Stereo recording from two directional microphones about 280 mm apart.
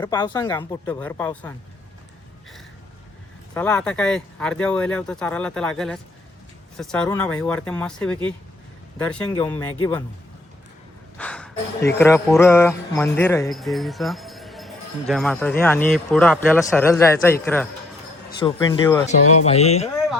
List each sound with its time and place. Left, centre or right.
0.0 s speech: centre
3.5 s speech: centre
11.2 s speech: centre
19.2 s speech: left
19.5 s speech: left